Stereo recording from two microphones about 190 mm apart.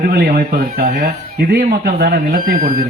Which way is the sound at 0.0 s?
55° right (ahead or behind).